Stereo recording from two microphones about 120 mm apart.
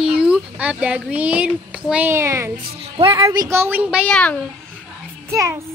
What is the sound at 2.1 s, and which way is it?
Speech, 25° right (ahead or behind).